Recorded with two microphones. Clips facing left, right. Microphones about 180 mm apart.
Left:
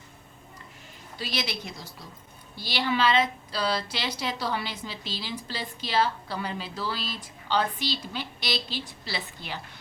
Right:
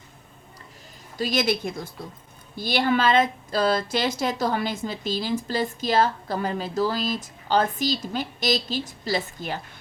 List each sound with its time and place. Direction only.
1.2 s a woman's voice: 50° right (ahead or behind)